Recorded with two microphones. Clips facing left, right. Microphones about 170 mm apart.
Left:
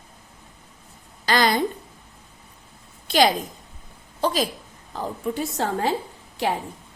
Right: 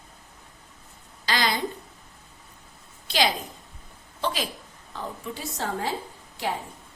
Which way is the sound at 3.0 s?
50° left (ahead or behind).